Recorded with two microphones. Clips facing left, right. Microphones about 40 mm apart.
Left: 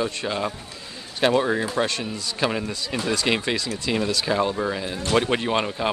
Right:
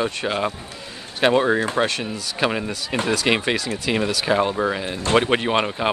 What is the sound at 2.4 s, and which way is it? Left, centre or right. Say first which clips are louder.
Speech: right 2 dB; centre.